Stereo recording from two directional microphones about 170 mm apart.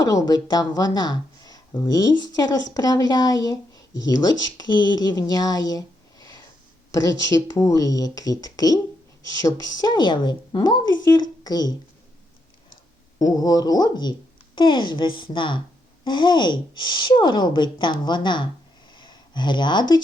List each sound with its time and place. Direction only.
0.0 s a woman's voice: 20° left (ahead or behind)
13.3 s a woman's voice: 20° left (ahead or behind)